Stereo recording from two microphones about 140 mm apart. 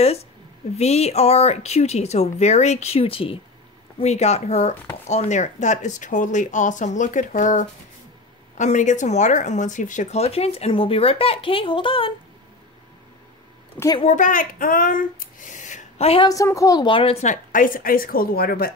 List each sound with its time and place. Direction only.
0.7 s speech: 50° left (ahead or behind)
4.0 s speech: 50° left (ahead or behind)
14.0 s speech: 65° left (ahead or behind)
16.3 s a woman's voice: 25° left (ahead or behind); by 18.7 s 90° left